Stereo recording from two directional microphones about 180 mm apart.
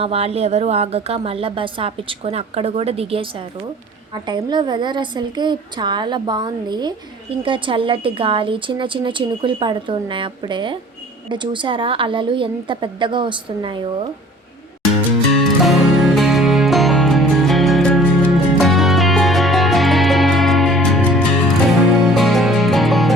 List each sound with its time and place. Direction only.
0.0 s a woman's voice: 35° right (ahead or behind)
15.4 s music: centre (ahead or behind)